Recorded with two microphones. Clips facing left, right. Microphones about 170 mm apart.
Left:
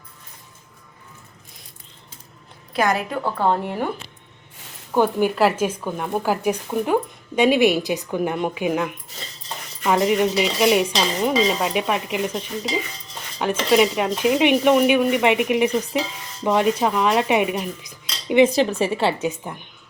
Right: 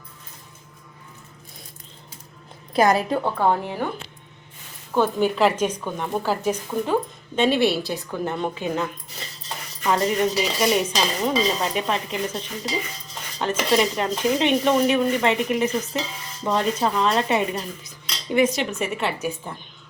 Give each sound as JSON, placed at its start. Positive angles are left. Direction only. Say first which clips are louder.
{"t": 2.7, "sound": "a woman's voice", "louder": "right 3 dB", "side_deg": -35}
{"t": 3.4, "sound": "speech", "louder": "left 3 dB", "side_deg": -5}
{"t": 4.9, "sound": "speech", "louder": "left 2 dB", "side_deg": 10}
{"t": 18.4, "sound": "a woman's voice", "louder": "left 5 dB", "side_deg": 35}